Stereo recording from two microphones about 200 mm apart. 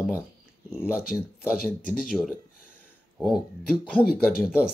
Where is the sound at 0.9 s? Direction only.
45° left (ahead or behind).